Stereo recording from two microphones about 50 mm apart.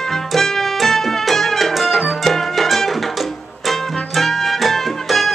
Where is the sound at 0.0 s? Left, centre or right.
Centre.